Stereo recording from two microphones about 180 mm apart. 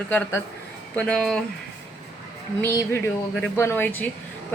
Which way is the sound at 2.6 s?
15° left (ahead or behind).